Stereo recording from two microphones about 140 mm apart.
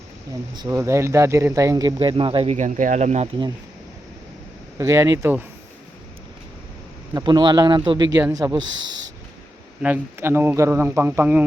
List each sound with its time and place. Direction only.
0.5 s speech: 25° right (ahead or behind); by 3.2 s 55° right (ahead or behind)
4.8 s a man's voice: 20° right (ahead or behind)
7.1 s a man's voice: 30° right (ahead or behind)
9.8 s a man's voice: 15° right (ahead or behind)